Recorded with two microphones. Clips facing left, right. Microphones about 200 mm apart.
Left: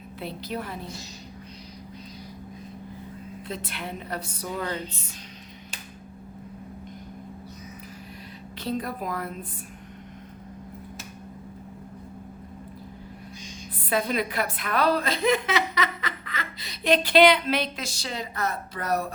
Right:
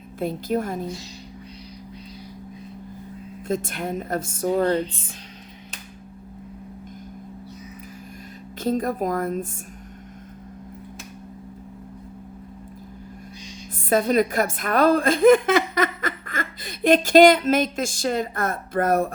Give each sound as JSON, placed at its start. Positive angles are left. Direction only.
{"t": 0.2, "sound": "a woman's voice", "side_deg": -45}
{"t": 3.4, "sound": "a woman's voice", "side_deg": -45}
{"t": 8.6, "sound": "a woman's voice", "side_deg": -45}
{"t": 13.9, "sound": "a woman's voice", "side_deg": -45}